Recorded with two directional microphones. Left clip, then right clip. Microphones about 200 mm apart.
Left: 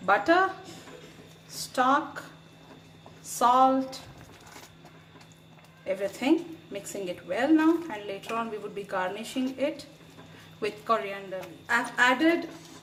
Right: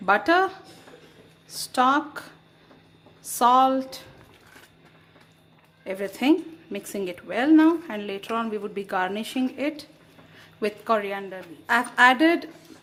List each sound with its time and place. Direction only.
0.0 s a woman's voice: 55° right (ahead or behind)
3.3 s a woman's voice: 55° right (ahead or behind)
5.8 s a woman's voice: 55° right (ahead or behind)